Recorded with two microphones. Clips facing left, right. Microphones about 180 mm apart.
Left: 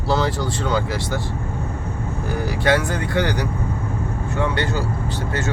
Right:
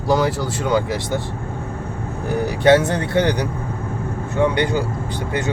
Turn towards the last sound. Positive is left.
turn(degrees=-15)  # may be behind; listen again after turning